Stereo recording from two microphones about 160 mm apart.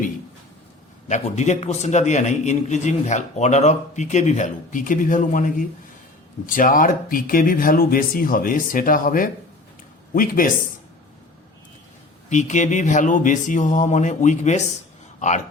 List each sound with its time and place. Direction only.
1.0 s a man's voice: 45° left (ahead or behind); by 10.5 s 60° left (ahead or behind)
12.3 s a man's voice: 50° left (ahead or behind)